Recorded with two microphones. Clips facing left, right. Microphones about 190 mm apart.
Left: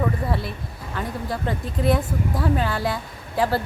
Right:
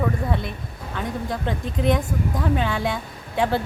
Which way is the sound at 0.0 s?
5° left (ahead or behind).